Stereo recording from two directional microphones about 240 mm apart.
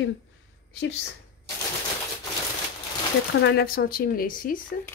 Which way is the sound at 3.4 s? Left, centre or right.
Left.